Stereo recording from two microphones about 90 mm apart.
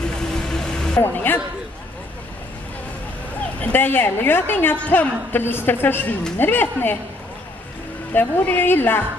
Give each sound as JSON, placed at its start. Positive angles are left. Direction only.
{"t": 0.1, "sound": "vehicle", "side_deg": 10}
{"t": 1.0, "sound": "a woman's voice", "side_deg": 20}
{"t": 3.6, "sound": "a woman's voice", "side_deg": 20}
{"t": 8.1, "sound": "a woman's voice", "side_deg": 20}